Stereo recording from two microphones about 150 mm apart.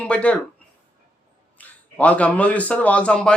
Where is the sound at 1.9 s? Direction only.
10° left (ahead or behind).